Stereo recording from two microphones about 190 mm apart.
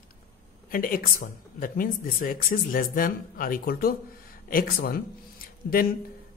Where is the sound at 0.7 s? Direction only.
50° left (ahead or behind).